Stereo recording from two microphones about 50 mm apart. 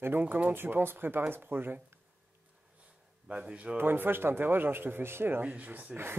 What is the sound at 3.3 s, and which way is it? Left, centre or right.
Speech, right.